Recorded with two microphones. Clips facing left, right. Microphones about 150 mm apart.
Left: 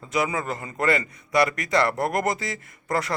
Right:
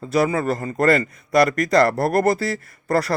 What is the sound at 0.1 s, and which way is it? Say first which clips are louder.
Speech: right 6 dB; 35° right (ahead or behind).